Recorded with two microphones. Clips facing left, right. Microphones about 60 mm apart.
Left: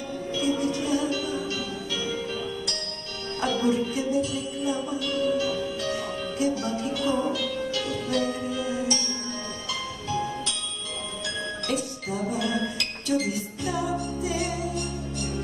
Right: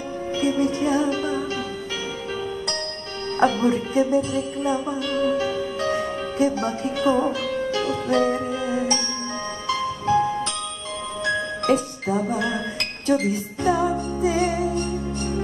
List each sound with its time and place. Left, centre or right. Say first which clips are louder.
0.3 s music: right 4 dB; right
3.3 s music: right 5 dB; right
11.2 s music: right 10 dB; right